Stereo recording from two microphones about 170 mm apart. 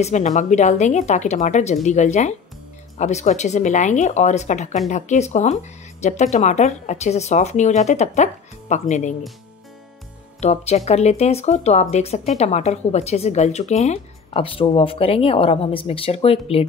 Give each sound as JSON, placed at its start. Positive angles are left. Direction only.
{"t": 0.0, "sound": "speech", "side_deg": 45}
{"t": 10.4, "sound": "speech", "side_deg": 40}